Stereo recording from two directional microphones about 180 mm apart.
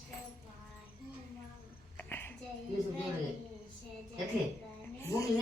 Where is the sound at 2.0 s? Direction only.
10° left (ahead or behind).